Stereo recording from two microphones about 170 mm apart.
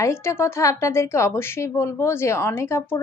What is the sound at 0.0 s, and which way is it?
A woman's voice, 15° left (ahead or behind).